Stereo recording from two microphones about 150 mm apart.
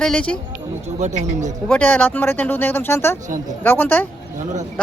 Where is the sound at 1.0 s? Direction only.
50° right (ahead or behind).